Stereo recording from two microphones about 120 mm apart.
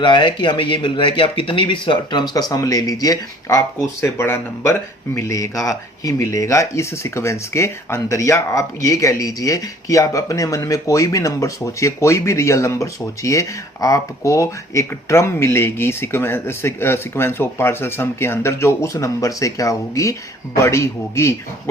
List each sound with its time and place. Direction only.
0.0 s speech: 40° left (ahead or behind); by 21.3 s 25° left (ahead or behind)